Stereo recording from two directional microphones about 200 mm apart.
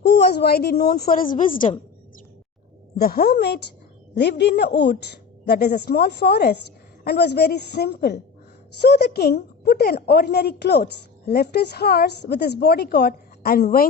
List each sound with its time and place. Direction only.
0.0 s a woman's voice: 55° left (ahead or behind)
3.0 s a woman's voice: 50° left (ahead or behind)